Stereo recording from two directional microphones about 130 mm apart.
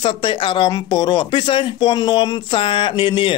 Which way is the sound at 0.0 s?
40° left (ahead or behind).